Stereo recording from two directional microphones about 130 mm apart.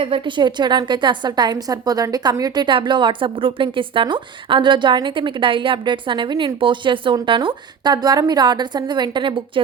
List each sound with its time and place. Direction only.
0.0 s a woman's voice: 40° right (ahead or behind)